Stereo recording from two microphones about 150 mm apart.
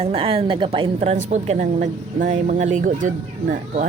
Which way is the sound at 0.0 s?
40° right (ahead or behind).